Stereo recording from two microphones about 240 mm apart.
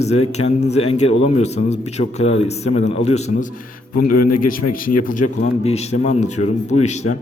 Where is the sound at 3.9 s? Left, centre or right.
Left.